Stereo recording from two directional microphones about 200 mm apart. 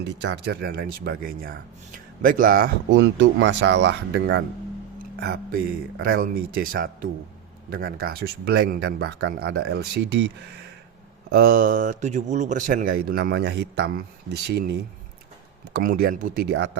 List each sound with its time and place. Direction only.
0.0 s a man's voice: 60° right (ahead or behind); by 2.6 s 45° right (ahead or behind)
2.9 s speech: 65° right (ahead or behind)
6.0 s a man's voice: 50° right (ahead or behind)